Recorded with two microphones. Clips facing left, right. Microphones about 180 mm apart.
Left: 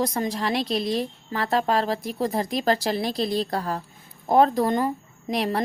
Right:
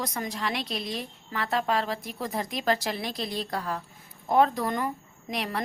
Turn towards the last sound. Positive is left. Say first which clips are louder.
# left 7 dB
turn(degrees=35)  # may be behind; listen again after turning